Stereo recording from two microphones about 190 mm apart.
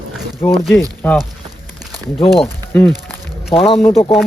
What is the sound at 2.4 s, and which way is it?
Speech, 10° left (ahead or behind).